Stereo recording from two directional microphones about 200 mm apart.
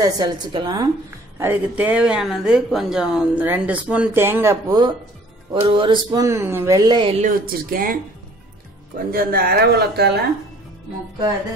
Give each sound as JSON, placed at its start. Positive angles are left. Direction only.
{"t": 0.0, "sound": "speech", "side_deg": -20}
{"t": 1.4, "sound": "speech", "side_deg": -10}
{"t": 7.2, "sound": "speech", "side_deg": -45}